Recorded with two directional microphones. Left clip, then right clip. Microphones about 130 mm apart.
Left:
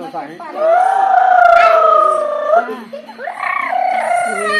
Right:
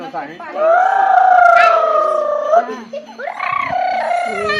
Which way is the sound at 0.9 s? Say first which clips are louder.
Even; 10° right (ahead or behind).